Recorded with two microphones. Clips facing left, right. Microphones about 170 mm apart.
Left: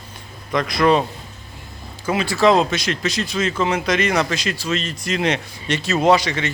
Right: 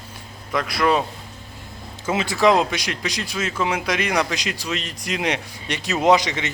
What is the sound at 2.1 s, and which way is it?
A man's voice, 20° right (ahead or behind).